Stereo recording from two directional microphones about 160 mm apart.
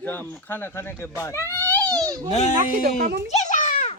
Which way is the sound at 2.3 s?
45° left (ahead or behind).